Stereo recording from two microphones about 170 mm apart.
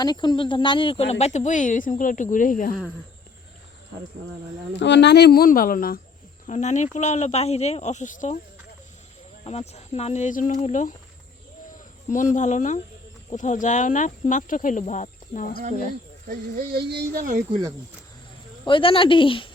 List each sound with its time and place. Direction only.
0.0 s speech: 25° left (ahead or behind); by 2.7 s 50° left (ahead or behind)
4.8 s speech: 90° left; by 6.0 s 55° left (ahead or behind)
6.5 s speech: 45° left (ahead or behind)
9.4 s speech: 40° left (ahead or behind)
12.1 s speech: 45° left (ahead or behind)
16.6 s speech: 65° right (ahead or behind)
18.6 s speech: 30° left (ahead or behind)